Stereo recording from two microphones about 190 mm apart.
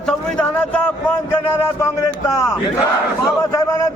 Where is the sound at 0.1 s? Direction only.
5° left (ahead or behind).